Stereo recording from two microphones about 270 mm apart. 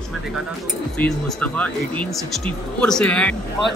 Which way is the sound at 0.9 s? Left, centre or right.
Centre.